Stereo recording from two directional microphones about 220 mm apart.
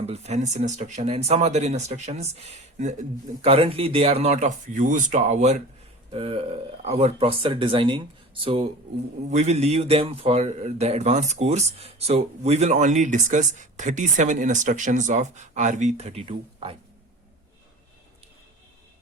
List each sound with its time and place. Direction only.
0.0 s a man's voice: 30° right (ahead or behind)
9.2 s a man's voice: 30° right (ahead or behind)